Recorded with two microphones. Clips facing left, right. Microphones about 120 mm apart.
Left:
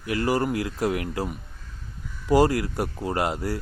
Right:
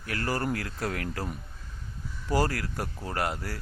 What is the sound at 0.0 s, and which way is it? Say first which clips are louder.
A man's voice: left 7 dB; 20° left (ahead or behind).